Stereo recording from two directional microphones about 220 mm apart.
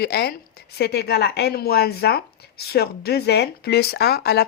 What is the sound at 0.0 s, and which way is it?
Speech, 45° left (ahead or behind).